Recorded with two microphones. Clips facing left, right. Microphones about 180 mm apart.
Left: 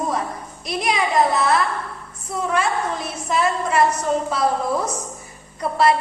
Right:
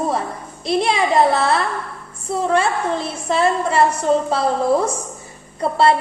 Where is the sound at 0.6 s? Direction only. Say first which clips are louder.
Right 5 dB; 30° right (ahead or behind).